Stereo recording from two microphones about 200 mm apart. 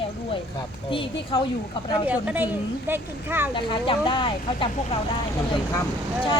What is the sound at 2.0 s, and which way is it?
Speech, 10° right (ahead or behind).